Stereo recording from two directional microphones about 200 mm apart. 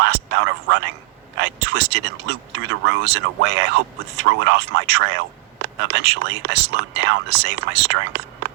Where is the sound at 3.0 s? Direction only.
60° right (ahead or behind).